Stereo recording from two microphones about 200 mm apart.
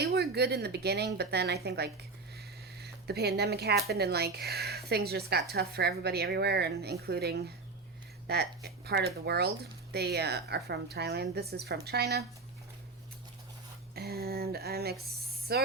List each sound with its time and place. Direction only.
0.0 s speech: 55° right (ahead or behind)
13.9 s speech: 50° right (ahead or behind)